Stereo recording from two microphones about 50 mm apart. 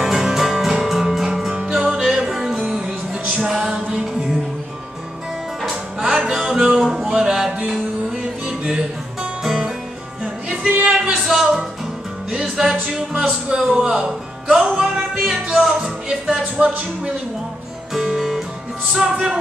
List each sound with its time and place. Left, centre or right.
0.0 s music: centre
3.3 s music: centre
5.6 s music: centre
17.9 s guitar: centre
18.9 s music: centre